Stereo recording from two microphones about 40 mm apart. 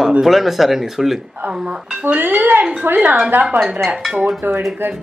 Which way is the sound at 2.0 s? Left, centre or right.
Right.